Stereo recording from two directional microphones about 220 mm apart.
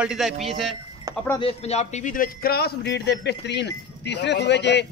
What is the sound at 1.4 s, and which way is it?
A man's voice, 30° left (ahead or behind).